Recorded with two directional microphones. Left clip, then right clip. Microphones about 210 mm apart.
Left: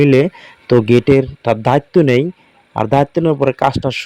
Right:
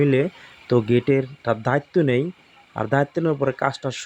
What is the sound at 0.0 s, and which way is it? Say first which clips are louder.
Speech: left 8 dB; 35° left (ahead or behind).